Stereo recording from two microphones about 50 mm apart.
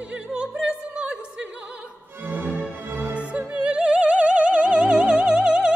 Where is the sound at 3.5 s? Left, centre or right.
Right.